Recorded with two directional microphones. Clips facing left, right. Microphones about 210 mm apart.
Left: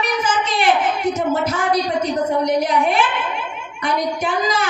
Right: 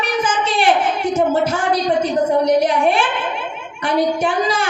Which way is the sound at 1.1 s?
30° right (ahead or behind).